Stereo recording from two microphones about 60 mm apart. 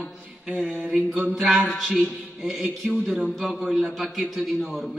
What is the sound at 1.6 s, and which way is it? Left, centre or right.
Speech, centre.